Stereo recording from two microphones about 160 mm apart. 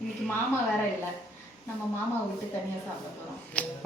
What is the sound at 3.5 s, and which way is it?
Speech, 10° left (ahead or behind).